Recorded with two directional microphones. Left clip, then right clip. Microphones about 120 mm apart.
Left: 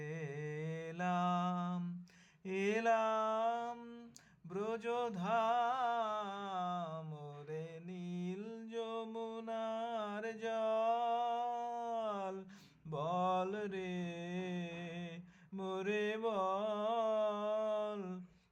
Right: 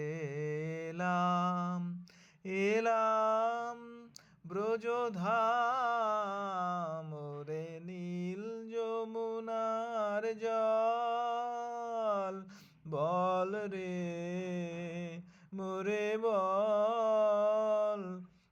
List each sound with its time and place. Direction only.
0.0 s mantra: 35° right (ahead or behind)
2.5 s a sound: 30° right (ahead or behind)
7.4 s mantra: 40° right (ahead or behind)